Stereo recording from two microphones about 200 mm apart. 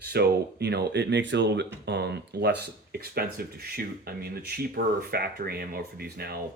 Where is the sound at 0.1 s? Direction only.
55° right (ahead or behind).